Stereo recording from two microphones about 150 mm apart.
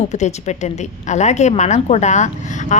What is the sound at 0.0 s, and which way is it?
A woman's voice, 50° left (ahead or behind).